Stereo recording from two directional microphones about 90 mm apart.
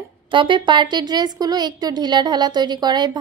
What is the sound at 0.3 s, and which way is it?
A woman's voice, 65° right (ahead or behind).